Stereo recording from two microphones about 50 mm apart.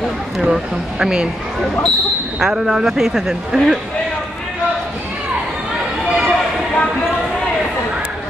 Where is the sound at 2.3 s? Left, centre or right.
Centre.